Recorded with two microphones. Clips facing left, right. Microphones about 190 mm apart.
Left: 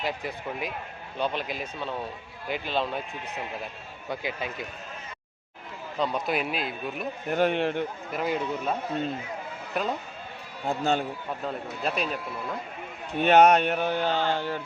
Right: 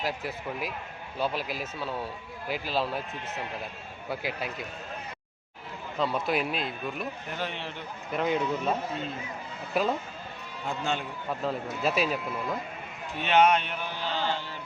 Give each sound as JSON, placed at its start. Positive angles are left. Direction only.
{"t": 0.0, "sound": "a man's voice", "side_deg": 0}
{"t": 6.0, "sound": "a man's voice", "side_deg": 0}
{"t": 7.3, "sound": "a sound", "side_deg": 50}
{"t": 8.1, "sound": "a man's voice", "side_deg": 5}
{"t": 9.7, "sound": "a man's voice", "side_deg": -5}
{"t": 10.7, "sound": "speech", "side_deg": 40}
{"t": 11.4, "sound": "a man's voice", "side_deg": -5}
{"t": 13.2, "sound": "a sound", "side_deg": 45}